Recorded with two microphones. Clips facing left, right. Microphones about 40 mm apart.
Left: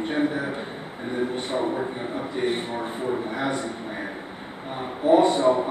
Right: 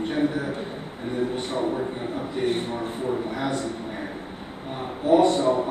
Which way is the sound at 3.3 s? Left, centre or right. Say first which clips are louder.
Left 1 dB; left.